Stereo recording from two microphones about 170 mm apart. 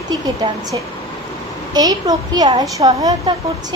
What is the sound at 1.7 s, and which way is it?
A woman's voice, 25° right (ahead or behind).